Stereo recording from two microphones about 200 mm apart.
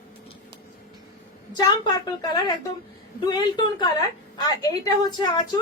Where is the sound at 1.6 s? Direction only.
20° left (ahead or behind).